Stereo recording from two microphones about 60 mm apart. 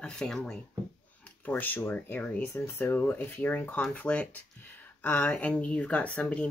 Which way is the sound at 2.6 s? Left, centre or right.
Left.